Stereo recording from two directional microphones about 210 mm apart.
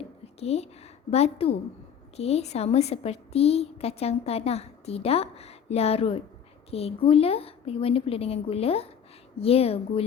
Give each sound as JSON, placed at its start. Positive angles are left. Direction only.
{"t": 0.3, "sound": "a woman's voice", "side_deg": 30}